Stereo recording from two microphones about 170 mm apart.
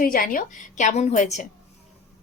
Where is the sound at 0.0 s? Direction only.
55° left (ahead or behind).